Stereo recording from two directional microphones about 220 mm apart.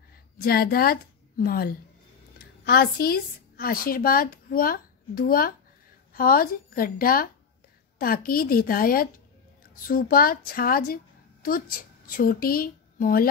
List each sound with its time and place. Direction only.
0.4 s a woman's voice: 45° left (ahead or behind)